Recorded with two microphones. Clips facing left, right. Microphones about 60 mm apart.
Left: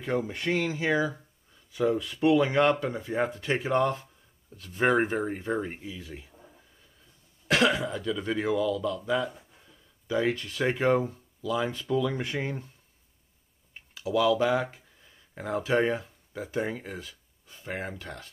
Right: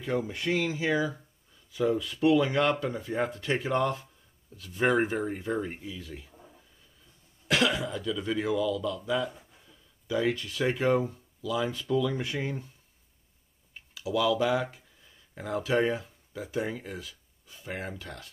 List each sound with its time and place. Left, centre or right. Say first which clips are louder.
0.0 s speech: left 1 dB; left
7.4 s speech: left 2 dB; left
13.9 s speech: left 2 dB; left